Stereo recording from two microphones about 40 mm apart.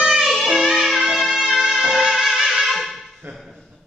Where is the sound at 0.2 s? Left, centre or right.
Centre.